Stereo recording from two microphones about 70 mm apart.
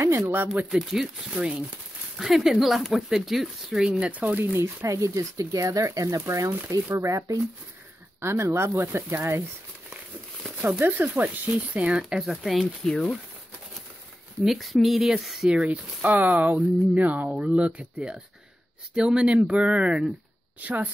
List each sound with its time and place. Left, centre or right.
0.7 s speech: centre; by 4.6 s right
4.8 s speech: right
8.2 s speech: right
10.6 s speech: right
12.0 s speech: centre
12.8 s speech: centre
14.4 s speech: centre
15.5 s speech: centre